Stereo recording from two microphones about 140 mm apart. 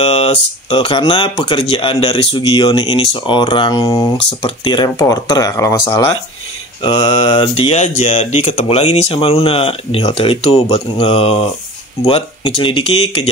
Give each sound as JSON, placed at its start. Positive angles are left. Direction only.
{"t": 0.0, "sound": "speech", "side_deg": 45}
{"t": 6.8, "sound": "speech", "side_deg": 30}
{"t": 7.8, "sound": "speech", "side_deg": 55}